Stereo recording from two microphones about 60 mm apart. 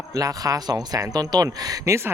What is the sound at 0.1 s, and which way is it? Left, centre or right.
Speech, right.